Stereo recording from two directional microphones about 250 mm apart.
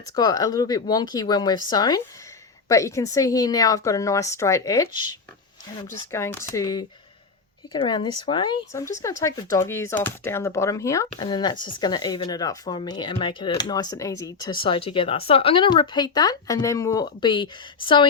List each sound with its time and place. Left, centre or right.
0.2 s speech: centre
6.1 s speech: centre